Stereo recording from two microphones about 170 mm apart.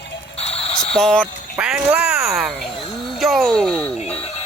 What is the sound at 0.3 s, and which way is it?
Music, 35° left (ahead or behind).